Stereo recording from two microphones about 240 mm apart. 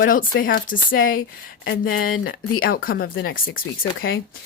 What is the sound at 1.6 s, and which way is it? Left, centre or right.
Speech, left.